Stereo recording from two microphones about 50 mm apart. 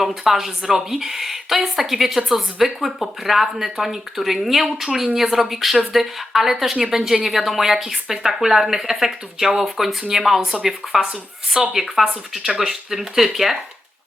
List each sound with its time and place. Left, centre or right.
0.3 s a woman's voice: centre
11.0 s a woman's voice: centre